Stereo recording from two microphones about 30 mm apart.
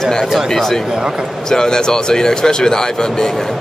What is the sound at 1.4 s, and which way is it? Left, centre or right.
Speech, left.